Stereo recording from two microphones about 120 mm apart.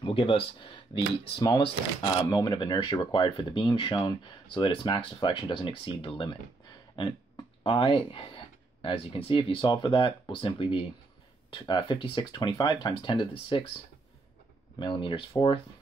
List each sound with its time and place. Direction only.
0.0 s speech: 45° left (ahead or behind)
2.2 s speech: 30° left (ahead or behind)
14.8 s speech: 45° left (ahead or behind)